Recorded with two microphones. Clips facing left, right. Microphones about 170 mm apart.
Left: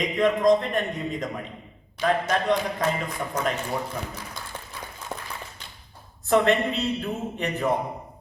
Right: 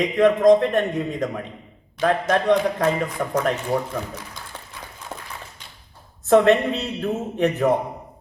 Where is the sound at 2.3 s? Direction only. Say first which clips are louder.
Right 5 dB; 60° right (ahead or behind).